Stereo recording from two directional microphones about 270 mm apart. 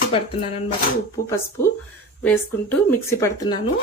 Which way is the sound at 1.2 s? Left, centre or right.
Centre.